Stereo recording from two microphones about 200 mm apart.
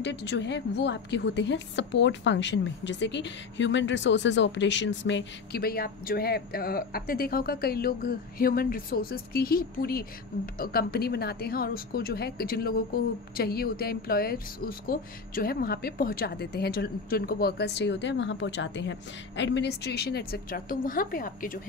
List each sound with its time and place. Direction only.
0.0 s a woman's voice: 60° left (ahead or behind); by 21.5 s 45° left (ahead or behind)